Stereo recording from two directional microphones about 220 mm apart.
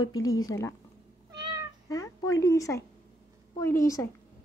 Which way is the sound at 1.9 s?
15° left (ahead or behind).